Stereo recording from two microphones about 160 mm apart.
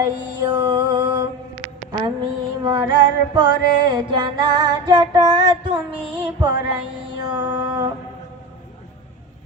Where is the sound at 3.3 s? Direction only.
30° right (ahead or behind).